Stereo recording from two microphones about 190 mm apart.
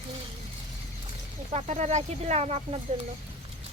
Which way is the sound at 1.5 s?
35° right (ahead or behind).